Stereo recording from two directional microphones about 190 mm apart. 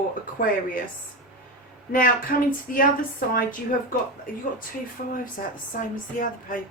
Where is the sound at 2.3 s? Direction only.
50° left (ahead or behind).